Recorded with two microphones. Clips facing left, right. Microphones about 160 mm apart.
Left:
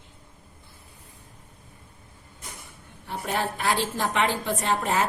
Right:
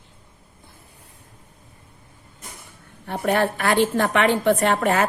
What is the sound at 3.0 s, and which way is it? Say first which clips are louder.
A woman's voice: right 8 dB; 65° right (ahead or behind).